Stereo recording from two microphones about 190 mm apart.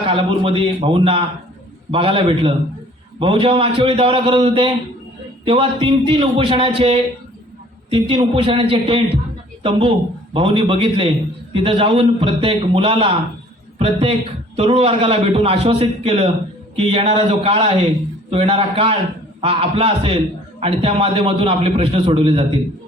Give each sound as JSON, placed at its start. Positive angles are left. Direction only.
{"t": 0.0, "sound": "a man's voice", "side_deg": -30}